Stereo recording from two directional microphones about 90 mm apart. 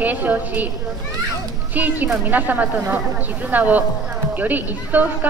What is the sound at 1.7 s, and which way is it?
A woman's voice, 20° right (ahead or behind).